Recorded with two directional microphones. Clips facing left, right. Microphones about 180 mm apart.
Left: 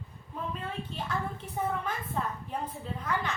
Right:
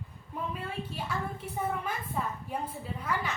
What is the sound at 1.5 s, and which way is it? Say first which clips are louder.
A woman's voice: left 1 dB; 10° right (ahead or behind).